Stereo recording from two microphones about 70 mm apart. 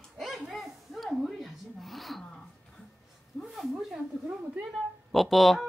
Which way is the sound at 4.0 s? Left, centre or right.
Right.